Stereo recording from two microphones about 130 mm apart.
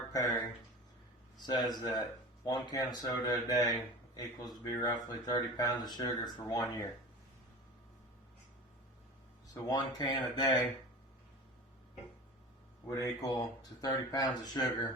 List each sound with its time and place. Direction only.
0.1 s speech: 30° left (ahead or behind)
1.5 s speech: 30° left (ahead or behind)
9.6 s speech: 35° left (ahead or behind)
13.0 s speech: 30° left (ahead or behind)